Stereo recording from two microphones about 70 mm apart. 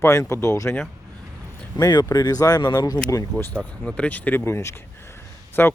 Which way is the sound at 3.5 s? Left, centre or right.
Centre.